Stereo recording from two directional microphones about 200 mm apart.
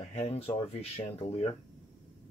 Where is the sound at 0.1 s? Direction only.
30° left (ahead or behind).